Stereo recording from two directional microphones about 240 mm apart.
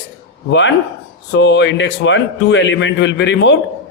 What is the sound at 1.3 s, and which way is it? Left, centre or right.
A man's voice, left.